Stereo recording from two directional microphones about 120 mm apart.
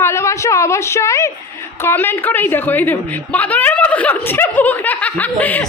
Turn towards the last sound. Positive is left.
turn(degrees=15)  # may be behind; listen again after turning